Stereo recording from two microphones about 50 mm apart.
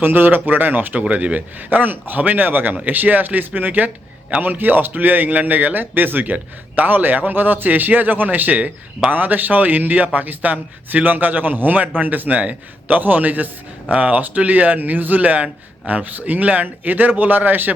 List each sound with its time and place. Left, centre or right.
0.0 s a man's voice: right
1.0 s a man's voice: right